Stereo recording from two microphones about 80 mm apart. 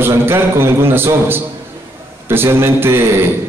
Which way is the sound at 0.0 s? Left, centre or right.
Right.